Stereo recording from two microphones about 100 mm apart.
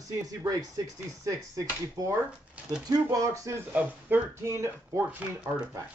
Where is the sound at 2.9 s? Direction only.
35° right (ahead or behind).